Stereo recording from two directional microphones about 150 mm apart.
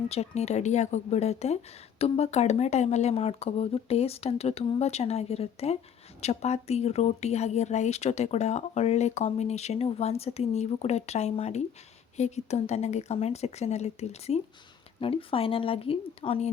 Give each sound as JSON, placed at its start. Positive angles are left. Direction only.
{"t": 0.1, "sound": "a woman's voice", "side_deg": 45}